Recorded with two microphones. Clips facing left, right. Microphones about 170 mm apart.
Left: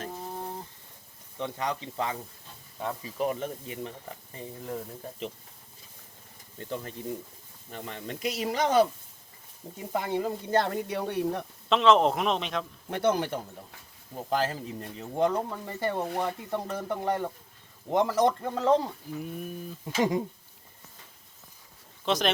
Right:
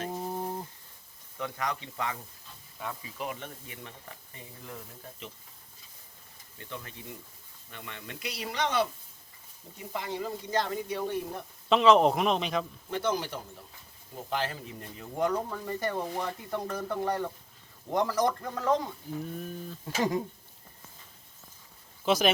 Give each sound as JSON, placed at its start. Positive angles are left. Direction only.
{"t": 0.3, "sound": "a sound", "side_deg": -15}
{"t": 1.4, "sound": "speech", "side_deg": 30}
{"t": 6.6, "sound": "speech", "side_deg": 40}
{"t": 9.9, "sound": "speech", "side_deg": 50}
{"t": 11.7, "sound": "a man's voice", "side_deg": 0}
{"t": 12.9, "sound": "speech", "side_deg": 55}
{"t": 14.3, "sound": "speech", "side_deg": 40}
{"t": 15.4, "sound": "speech", "side_deg": 15}
{"t": 19.2, "sound": "speech", "side_deg": 10}
{"t": 22.0, "sound": "speech", "side_deg": -5}